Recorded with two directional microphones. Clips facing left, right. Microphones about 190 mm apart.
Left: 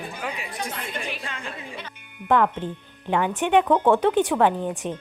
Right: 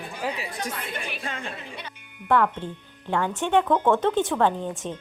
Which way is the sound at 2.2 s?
15° left (ahead or behind).